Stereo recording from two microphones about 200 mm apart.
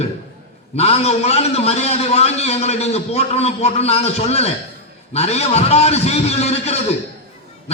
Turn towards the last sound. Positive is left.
turn(degrees=30)  # may be behind; listen again after turning